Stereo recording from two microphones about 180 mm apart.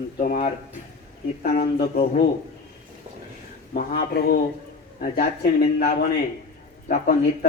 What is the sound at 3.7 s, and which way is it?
Speech, 60° left (ahead or behind).